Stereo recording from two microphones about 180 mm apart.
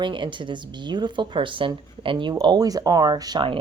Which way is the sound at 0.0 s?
25° right (ahead or behind).